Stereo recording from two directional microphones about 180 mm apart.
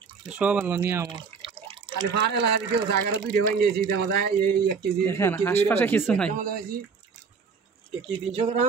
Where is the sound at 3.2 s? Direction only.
55° right (ahead or behind).